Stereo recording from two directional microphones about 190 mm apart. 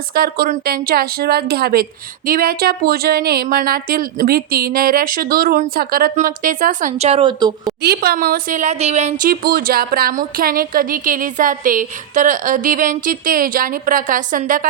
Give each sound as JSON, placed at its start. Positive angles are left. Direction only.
{"t": 0.1, "sound": "a woman's voice", "side_deg": -50}
{"t": 7.8, "sound": "a woman's voice", "side_deg": -55}
{"t": 9.2, "sound": "a woman's voice", "side_deg": -50}